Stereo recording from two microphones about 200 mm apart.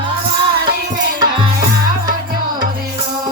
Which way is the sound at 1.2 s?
20° right (ahead or behind).